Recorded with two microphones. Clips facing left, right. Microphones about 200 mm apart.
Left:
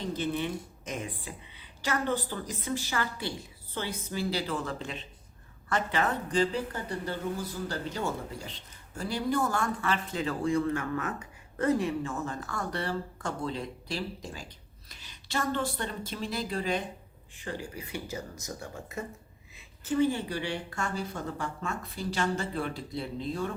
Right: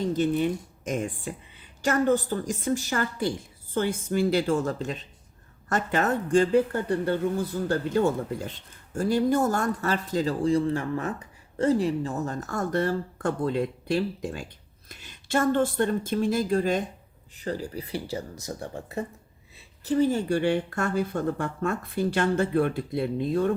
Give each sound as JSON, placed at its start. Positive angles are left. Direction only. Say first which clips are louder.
{"t": 0.0, "sound": "a woman's voice", "louder": "right 7 dB", "side_deg": -45}